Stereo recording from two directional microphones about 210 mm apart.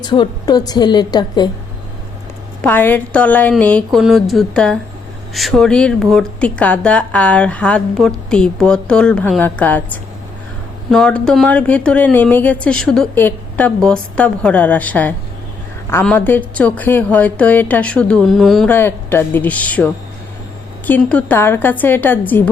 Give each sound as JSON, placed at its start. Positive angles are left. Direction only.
{"t": 0.0, "sound": "a woman's voice", "side_deg": 20}
{"t": 2.6, "sound": "a woman's voice", "side_deg": 10}